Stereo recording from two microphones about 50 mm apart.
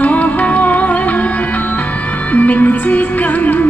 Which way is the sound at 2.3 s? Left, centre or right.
Left.